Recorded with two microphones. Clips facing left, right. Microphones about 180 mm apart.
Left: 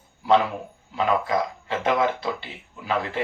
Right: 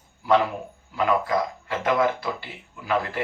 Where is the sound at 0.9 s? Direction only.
20° left (ahead or behind).